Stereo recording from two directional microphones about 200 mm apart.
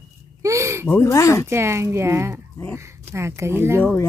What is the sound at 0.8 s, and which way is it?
Speech, 10° left (ahead or behind).